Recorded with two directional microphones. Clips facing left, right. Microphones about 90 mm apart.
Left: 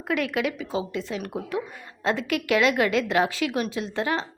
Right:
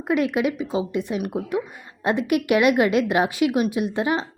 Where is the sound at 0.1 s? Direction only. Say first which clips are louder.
Right 4 dB; 20° right (ahead or behind).